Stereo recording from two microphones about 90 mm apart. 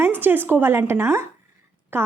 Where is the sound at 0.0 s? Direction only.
20° right (ahead or behind).